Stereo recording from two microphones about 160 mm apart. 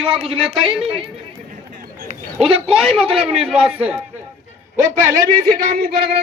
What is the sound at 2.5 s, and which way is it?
Speech, 35° right (ahead or behind).